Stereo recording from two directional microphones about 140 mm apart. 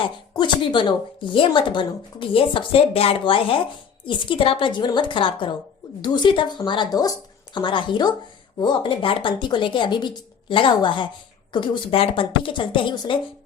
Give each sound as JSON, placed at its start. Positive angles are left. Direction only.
{"t": 0.0, "sound": "a woman's voice", "side_deg": 35}